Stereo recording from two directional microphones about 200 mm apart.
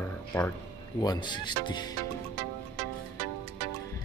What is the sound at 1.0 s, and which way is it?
Speech, 20° left (ahead or behind).